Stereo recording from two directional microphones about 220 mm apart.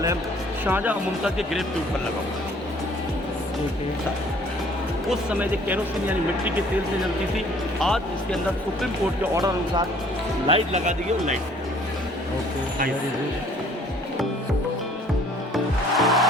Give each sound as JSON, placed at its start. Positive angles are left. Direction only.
{"t": 0.6, "sound": "speech", "side_deg": -10}
{"t": 5.0, "sound": "speech", "side_deg": -5}
{"t": 7.8, "sound": "speech", "side_deg": 0}
{"t": 9.3, "sound": "speech", "side_deg": -15}
{"t": 10.4, "sound": "speech", "side_deg": -30}
{"t": 15.5, "sound": "music", "side_deg": 0}